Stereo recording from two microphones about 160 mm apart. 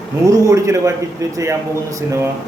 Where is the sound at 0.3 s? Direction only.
20° right (ahead or behind).